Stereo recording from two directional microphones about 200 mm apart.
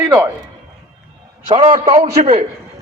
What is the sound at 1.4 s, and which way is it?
Speech, 30° right (ahead or behind).